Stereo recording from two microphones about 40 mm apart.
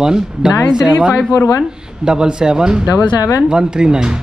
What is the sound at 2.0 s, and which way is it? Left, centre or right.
Speech, centre.